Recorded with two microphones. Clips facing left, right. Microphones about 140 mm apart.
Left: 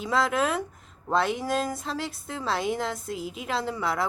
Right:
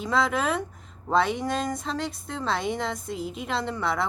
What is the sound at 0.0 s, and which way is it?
A woman's voice, centre (ahead or behind).